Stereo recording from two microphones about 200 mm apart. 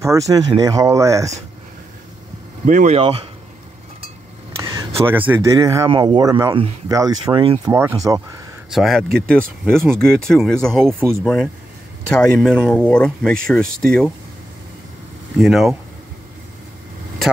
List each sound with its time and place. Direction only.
0.3 s speech: 20° right (ahead or behind)
2.6 s speech: 40° right (ahead or behind)
4.6 s a sound: 20° right (ahead or behind)
5.0 s speech: 10° right (ahead or behind); by 7.7 s 25° right (ahead or behind)
7.7 s speech: 15° right (ahead or behind)
8.6 s speech: centre (ahead or behind)
11.0 s speech: 10° right (ahead or behind)
12.1 s speech: 5° left (ahead or behind)
15.3 s speech: centre (ahead or behind)